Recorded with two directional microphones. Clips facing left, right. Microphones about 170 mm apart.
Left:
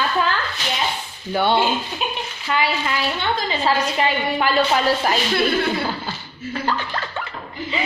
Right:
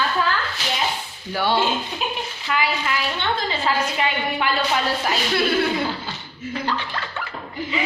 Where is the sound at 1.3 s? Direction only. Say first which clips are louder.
Left 3 dB; 25° left (ahead or behind).